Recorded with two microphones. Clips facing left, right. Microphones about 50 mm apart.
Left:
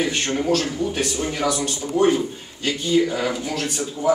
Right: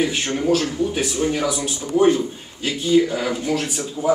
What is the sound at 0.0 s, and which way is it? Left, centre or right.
A man's voice, centre.